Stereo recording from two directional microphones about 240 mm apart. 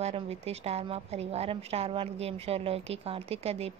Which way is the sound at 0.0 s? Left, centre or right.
Right.